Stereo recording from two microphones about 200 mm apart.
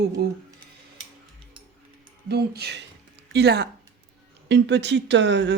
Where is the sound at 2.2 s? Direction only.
55° right (ahead or behind).